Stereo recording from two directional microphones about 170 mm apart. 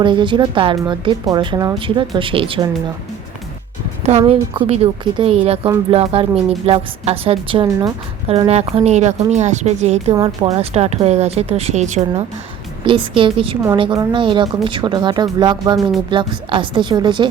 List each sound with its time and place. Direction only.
0.0 s speech: 30° right (ahead or behind)
4.3 s speech: 35° right (ahead or behind)
8.3 s speech: 40° right (ahead or behind)
12.8 s speech: 30° right (ahead or behind)